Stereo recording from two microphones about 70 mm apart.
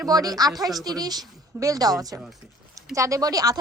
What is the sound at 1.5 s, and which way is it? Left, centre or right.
Speech, right.